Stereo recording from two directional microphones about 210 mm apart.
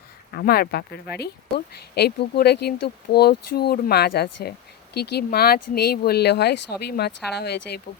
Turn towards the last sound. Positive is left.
turn(degrees=50)  # may be behind; listen again after turning